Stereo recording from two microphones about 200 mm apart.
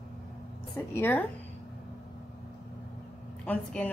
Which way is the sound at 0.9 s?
10° left (ahead or behind).